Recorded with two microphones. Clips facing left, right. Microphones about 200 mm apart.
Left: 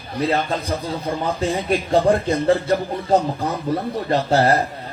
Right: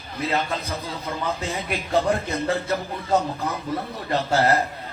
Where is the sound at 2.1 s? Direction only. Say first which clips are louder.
Left 7 dB; 30° left (ahead or behind).